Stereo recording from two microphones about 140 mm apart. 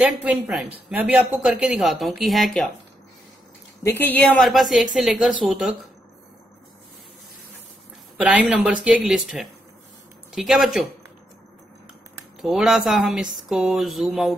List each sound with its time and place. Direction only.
0.0 s speech: 10° right (ahead or behind)
3.8 s speech: 15° left (ahead or behind)
4.4 s speech: centre (ahead or behind)
8.2 s speech: 10° right (ahead or behind)
12.4 s speech: 5° right (ahead or behind)